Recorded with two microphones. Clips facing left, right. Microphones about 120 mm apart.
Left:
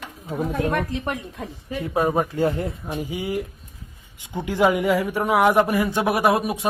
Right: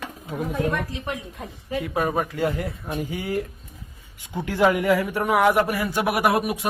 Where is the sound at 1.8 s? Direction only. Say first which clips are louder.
Left 4 dB; 25° left (ahead or behind).